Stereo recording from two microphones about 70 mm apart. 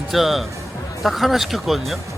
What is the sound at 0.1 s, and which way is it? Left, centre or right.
Speech, centre.